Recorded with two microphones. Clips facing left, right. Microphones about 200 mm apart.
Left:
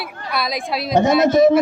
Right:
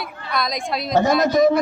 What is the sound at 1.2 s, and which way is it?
Speech, 25° left (ahead or behind).